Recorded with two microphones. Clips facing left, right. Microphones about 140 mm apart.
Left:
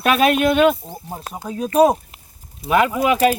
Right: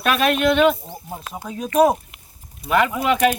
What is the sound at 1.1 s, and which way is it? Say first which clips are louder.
Speech: left 2 dB; 40° left (ahead or behind).